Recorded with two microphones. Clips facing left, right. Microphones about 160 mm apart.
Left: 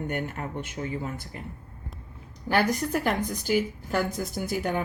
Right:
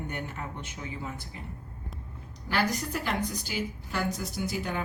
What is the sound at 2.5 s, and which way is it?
A woman's voice, 50° left (ahead or behind).